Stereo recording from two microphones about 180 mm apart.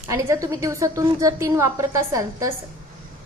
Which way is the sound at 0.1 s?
15° right (ahead or behind).